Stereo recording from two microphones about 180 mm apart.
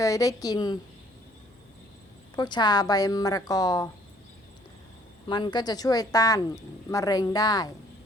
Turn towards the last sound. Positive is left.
turn(degrees=20)  # may be behind; listen again after turning